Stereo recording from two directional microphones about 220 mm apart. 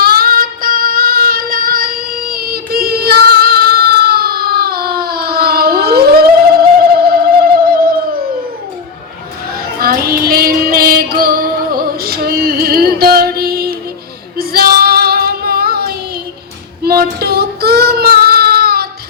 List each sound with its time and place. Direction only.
0.0 s female singing: 45° right (ahead or behind)
9.8 s child singing: 45° right (ahead or behind)